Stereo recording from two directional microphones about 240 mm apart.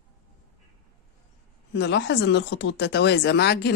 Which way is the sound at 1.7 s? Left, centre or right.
Left.